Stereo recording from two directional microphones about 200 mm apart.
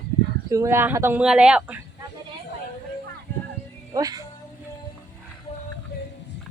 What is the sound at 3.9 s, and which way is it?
Speech, 20° right (ahead or behind).